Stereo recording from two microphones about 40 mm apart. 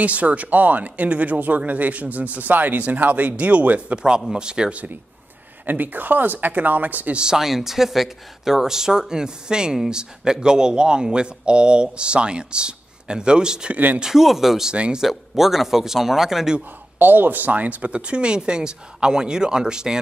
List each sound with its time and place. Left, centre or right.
0.0 s speech: right
4.3 s speech: right
5.7 s speech: right
7.3 s speech: centre
14.0 s speech: centre
14.7 s speech: right
15.0 s speech: centre
17.0 s speech: right; by 20.0 s centre